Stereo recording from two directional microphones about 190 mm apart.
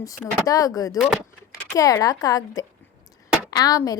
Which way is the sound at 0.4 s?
20° left (ahead or behind).